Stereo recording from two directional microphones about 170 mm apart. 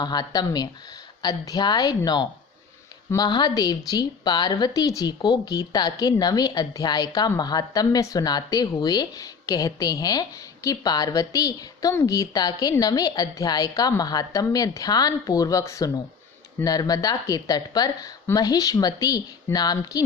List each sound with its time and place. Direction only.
0.0 s a woman's voice: 25° left (ahead or behind)